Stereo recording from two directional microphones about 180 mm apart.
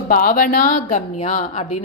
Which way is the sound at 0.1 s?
55° left (ahead or behind).